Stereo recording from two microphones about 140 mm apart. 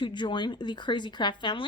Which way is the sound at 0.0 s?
35° left (ahead or behind).